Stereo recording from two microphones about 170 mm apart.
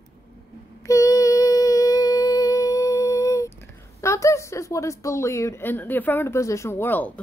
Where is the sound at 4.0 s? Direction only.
15° left (ahead or behind).